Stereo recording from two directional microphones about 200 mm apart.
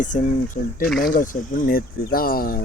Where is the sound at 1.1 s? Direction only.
45° left (ahead or behind).